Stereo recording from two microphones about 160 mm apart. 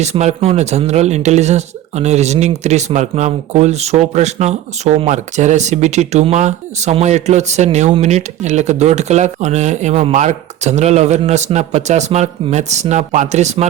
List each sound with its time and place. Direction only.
0.0 s speech: 45° right (ahead or behind)